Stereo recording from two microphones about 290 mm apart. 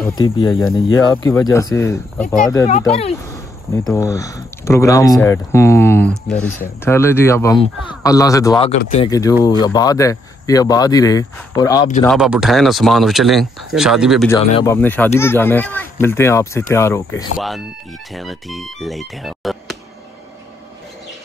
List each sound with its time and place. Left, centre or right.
0.2 s speech: centre
2.8 s speech: left
3.7 s speech: centre
12.0 s speech: centre
14.5 s speech: centre